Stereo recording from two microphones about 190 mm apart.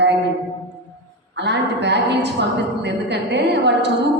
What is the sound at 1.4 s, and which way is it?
A woman's voice, 65° right (ahead or behind).